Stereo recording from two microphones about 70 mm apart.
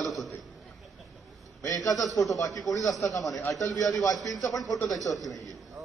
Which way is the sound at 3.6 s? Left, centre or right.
Left.